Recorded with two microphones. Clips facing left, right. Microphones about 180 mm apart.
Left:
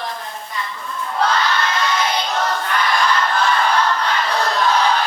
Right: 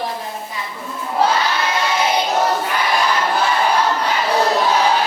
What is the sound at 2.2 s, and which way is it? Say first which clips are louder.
Choir: right 4 dB; 10° right (ahead or behind).